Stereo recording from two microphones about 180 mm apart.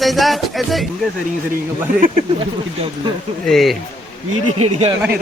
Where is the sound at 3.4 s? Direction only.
Centre (ahead or behind).